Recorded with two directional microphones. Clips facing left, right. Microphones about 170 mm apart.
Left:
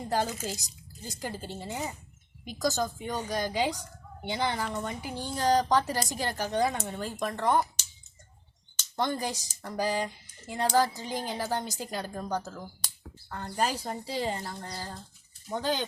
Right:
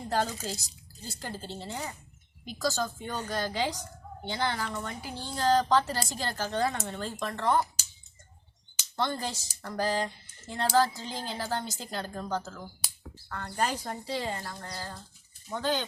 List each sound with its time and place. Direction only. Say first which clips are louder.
0.1 s a woman's voice: even; 15° left (ahead or behind)
9.0 s a woman's voice: left 1 dB; 15° left (ahead or behind)
12.8 s a sound: right 1 dB; 10° right (ahead or behind)
13.3 s a woman's voice: left 1 dB; 15° left (ahead or behind)